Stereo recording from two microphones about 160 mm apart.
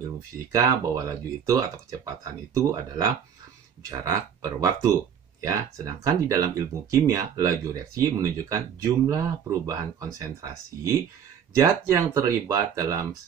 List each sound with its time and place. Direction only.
0.5 s speech: 20° right (ahead or behind)